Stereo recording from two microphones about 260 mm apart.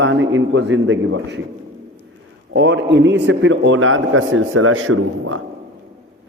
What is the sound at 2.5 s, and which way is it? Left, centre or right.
A man's voice, right.